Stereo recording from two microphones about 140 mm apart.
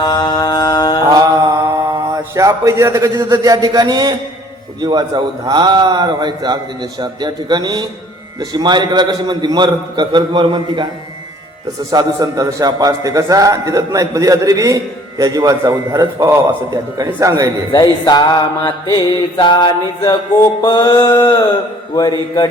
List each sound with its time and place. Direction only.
0.0 s mantra: 30° left (ahead or behind)
1.9 s a man's voice: 25° right (ahead or behind)
11.9 s a man's voice: 25° right (ahead or behind)
17.7 s mantra: 30° left (ahead or behind)